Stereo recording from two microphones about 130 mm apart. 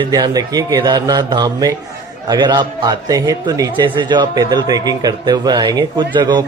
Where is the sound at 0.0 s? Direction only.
30° right (ahead or behind).